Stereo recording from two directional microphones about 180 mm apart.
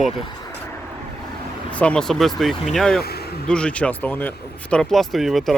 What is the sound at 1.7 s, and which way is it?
Speech, 5° left (ahead or behind).